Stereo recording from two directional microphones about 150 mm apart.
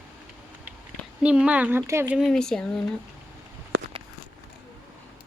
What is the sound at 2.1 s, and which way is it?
Speech, centre (ahead or behind).